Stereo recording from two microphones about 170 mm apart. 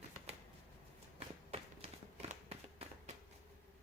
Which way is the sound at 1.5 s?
40° right (ahead or behind).